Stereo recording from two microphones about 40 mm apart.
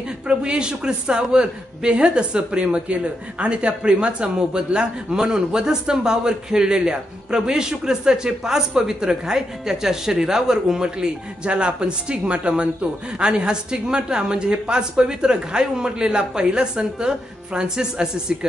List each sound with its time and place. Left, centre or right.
0.3 s a woman's voice: right